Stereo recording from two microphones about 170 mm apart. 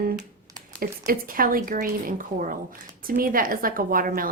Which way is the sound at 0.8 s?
55° right (ahead or behind).